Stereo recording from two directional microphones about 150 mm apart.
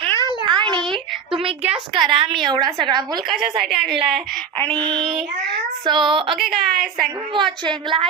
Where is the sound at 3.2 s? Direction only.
Centre (ahead or behind).